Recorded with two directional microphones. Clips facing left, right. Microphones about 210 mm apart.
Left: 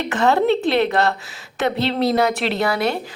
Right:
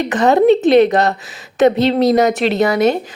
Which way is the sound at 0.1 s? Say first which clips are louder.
Right 6 dB; 20° right (ahead or behind).